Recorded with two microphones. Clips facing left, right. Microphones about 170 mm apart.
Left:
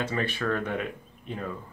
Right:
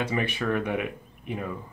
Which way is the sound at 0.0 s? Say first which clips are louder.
Right 1 dB; 15° right (ahead or behind).